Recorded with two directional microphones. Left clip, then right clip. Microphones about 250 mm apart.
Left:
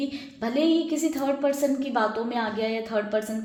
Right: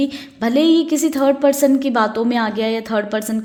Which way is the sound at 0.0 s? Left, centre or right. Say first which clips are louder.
Right 9 dB; right.